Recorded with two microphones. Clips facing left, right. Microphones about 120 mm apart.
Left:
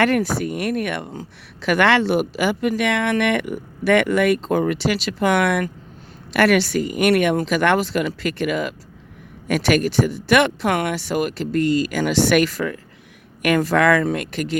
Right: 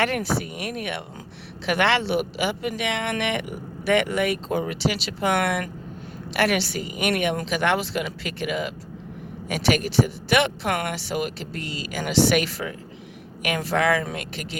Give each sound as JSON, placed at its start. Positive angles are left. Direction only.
{"t": 0.0, "sound": "speech", "side_deg": 45}